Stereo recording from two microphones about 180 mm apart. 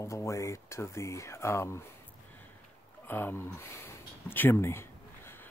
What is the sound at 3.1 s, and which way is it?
Speech, 10° left (ahead or behind).